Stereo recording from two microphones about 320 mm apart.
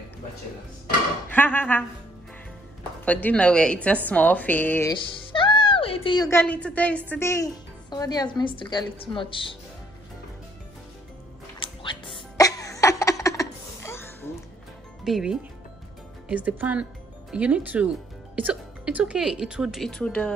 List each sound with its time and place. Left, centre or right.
1.3 s a woman's voice: centre
3.1 s a woman's voice: centre
11.6 s music: centre
12.4 s a sound: centre
15.0 s a woman's voice: centre